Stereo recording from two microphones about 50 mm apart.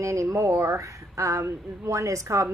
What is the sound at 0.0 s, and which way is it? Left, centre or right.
A woman's voice, right.